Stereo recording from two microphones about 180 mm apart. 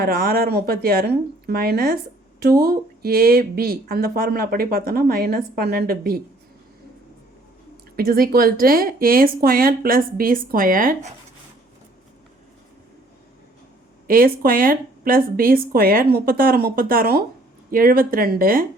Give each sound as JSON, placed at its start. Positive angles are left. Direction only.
{"t": 0.0, "sound": "speech", "side_deg": -55}
{"t": 7.9, "sound": "speech", "side_deg": -55}
{"t": 14.1, "sound": "speech", "side_deg": -55}